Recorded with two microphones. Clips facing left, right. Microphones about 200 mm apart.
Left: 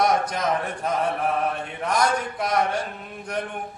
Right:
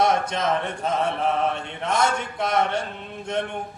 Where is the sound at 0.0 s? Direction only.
25° right (ahead or behind).